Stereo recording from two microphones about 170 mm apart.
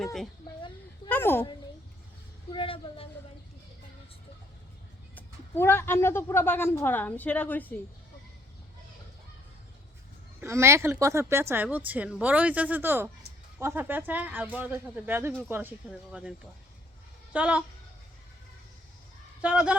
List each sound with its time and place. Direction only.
0.0 s speech: centre (ahead or behind)
1.0 s a sound: 15° left (ahead or behind)
2.5 s speech: 30° left (ahead or behind)
5.1 s speech: 15° left (ahead or behind)
10.4 s a woman's voice: 15° right (ahead or behind)
17.3 s a woman's voice: 5° right (ahead or behind)
19.4 s a woman's voice: 5° right (ahead or behind)